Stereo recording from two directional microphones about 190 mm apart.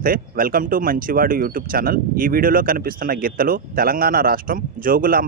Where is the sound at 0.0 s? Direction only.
50° right (ahead or behind).